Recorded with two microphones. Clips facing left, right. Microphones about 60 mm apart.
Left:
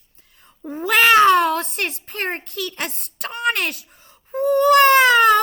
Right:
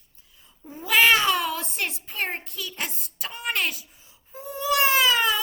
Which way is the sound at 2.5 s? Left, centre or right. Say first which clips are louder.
Left 6 dB; left.